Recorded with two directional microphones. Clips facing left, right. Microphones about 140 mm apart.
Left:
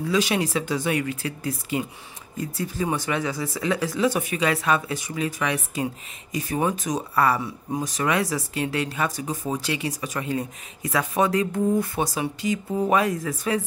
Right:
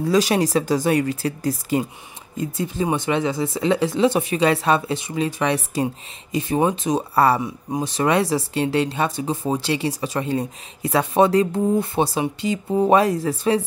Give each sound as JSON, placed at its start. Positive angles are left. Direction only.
{"t": 0.0, "sound": "speech", "side_deg": -40}
{"t": 2.3, "sound": "speech", "side_deg": -20}